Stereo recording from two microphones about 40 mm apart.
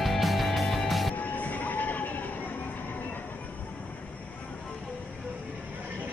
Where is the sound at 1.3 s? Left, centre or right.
Left.